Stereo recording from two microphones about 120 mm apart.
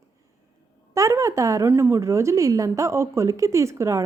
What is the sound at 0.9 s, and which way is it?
A woman's voice, 25° right (ahead or behind).